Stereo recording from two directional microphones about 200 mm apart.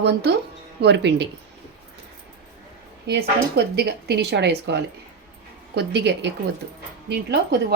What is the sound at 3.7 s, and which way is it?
Speech, 55° right (ahead or behind).